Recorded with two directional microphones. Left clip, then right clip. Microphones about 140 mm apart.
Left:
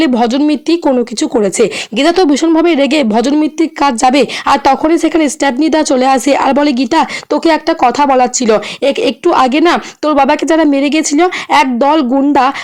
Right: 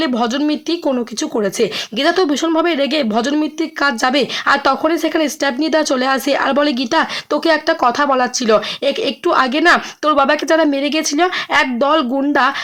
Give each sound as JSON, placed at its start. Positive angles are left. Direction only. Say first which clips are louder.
{"t": 0.0, "sound": "speech", "louder": "left 6 dB", "side_deg": 40}